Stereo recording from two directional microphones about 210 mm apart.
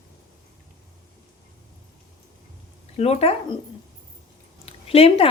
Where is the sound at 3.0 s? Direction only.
30° left (ahead or behind).